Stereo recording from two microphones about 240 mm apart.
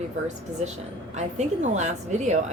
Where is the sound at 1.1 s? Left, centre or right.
Right.